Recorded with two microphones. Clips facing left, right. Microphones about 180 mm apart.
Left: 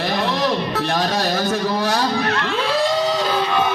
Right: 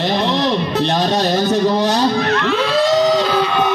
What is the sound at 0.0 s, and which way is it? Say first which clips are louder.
Music: right 3 dB; 25° right (ahead or behind).